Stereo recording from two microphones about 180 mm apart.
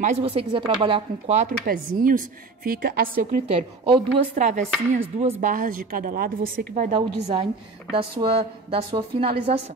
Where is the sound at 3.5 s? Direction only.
30° right (ahead or behind).